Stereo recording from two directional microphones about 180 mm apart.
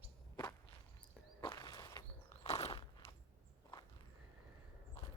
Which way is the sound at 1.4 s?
20° left (ahead or behind).